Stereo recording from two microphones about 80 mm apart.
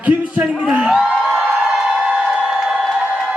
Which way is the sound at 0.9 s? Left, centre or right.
Centre.